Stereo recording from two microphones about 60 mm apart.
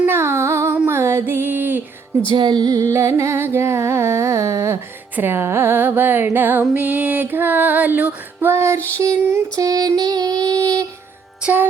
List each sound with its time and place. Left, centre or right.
0.1 s music: right
2.6 s music: right
2.9 s carnatic music: right
5.1 s music: right
6.7 s female singing: right
8.4 s music: right
9.2 s music: right
9.6 s female singing: right
11.4 s music: centre